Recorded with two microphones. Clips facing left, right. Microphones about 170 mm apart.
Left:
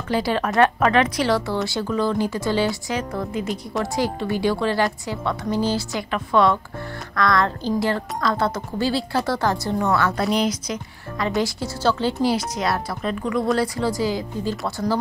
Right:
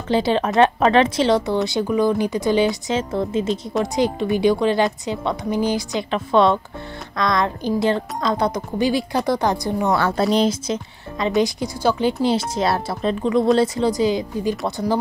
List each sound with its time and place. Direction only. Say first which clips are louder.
0.1 s a woman's voice: right 3 dB; 20° right (ahead or behind)
9.9 s a woman's voice: right 3 dB; 30° right (ahead or behind)